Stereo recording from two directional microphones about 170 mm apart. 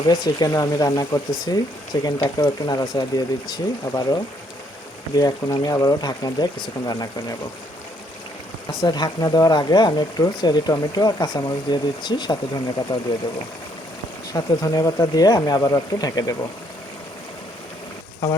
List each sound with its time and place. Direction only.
0.1 s speech: 20° left (ahead or behind)
8.8 s speech: 25° left (ahead or behind)
14.3 s speech: 25° left (ahead or behind)